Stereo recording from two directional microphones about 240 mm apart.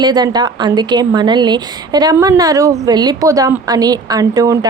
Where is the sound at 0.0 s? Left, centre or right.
Centre.